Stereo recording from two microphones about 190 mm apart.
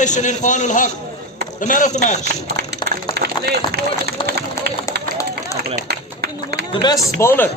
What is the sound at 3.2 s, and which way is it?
Run, 60° right (ahead or behind).